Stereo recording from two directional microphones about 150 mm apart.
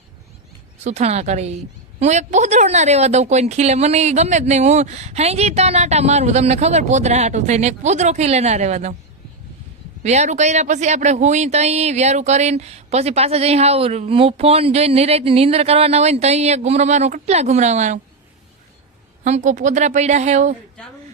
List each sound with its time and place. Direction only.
0.9 s speech: 50° right (ahead or behind)
10.0 s speech: 50° right (ahead or behind)
19.2 s speech: 50° right (ahead or behind)